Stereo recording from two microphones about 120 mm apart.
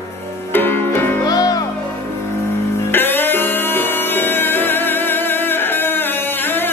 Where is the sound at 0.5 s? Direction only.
15° left (ahead or behind).